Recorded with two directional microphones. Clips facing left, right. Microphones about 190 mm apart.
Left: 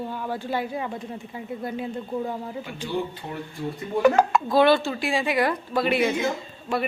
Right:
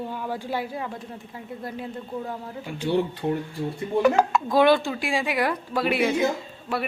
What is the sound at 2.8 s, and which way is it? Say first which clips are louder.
Speech: right 6 dB; 65° right (ahead or behind).